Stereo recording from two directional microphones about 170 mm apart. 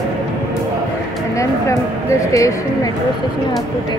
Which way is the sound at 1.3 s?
20° left (ahead or behind).